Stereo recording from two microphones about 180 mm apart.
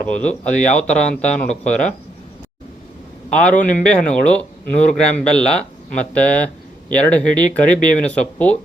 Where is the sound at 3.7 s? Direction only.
5° left (ahead or behind).